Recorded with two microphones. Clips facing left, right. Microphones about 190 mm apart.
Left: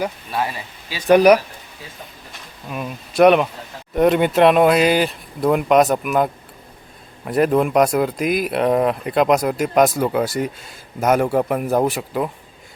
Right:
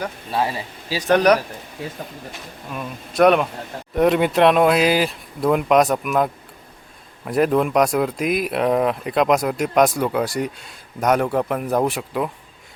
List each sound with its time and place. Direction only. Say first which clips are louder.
0.3 s speech: right 2 dB; 30° right (ahead or behind)
1.0 s speech: left 4 dB; 10° left (ahead or behind)
1.8 s speech: right 10 dB; 60° right (ahead or behind)
2.6 s speech: left 3 dB; 5° left (ahead or behind)